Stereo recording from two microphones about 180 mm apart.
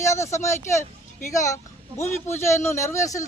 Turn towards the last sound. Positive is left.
turn(degrees=15)  # may be behind; listen again after turning